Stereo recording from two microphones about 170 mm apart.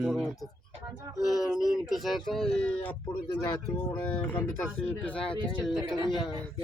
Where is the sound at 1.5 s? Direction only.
5° right (ahead or behind).